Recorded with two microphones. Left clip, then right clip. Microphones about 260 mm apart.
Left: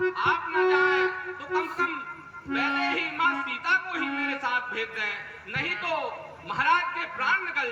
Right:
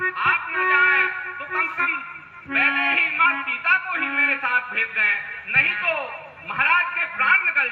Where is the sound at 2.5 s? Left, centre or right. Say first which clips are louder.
Right 7 dB; centre.